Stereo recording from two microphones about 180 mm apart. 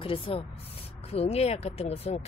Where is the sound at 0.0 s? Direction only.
30° left (ahead or behind).